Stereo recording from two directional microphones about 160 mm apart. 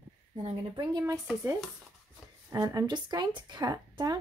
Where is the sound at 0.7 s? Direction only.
20° right (ahead or behind).